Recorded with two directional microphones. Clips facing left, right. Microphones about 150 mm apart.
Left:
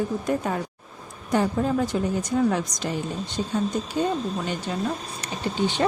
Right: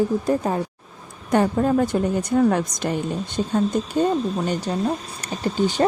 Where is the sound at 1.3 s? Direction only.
55° right (ahead or behind).